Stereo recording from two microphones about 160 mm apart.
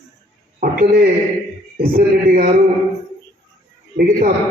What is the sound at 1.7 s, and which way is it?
Speech, 65° right (ahead or behind).